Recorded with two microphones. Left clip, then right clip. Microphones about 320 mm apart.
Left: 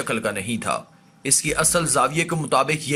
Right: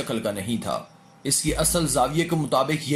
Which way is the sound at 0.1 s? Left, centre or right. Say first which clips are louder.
Left 4 dB; left.